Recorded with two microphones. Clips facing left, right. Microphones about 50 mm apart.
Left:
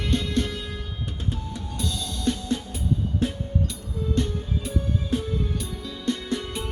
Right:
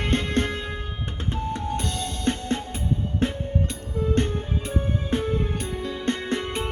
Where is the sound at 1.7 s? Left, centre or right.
Right.